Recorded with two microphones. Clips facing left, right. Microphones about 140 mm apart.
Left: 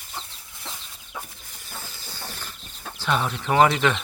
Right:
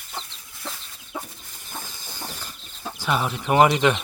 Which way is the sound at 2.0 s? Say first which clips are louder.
Right 1 dB; 15° right (ahead or behind).